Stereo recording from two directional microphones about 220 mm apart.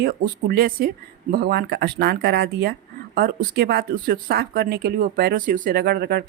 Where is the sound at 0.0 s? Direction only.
45° right (ahead or behind).